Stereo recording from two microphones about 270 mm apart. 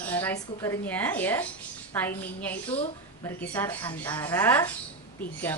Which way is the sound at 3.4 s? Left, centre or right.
Centre.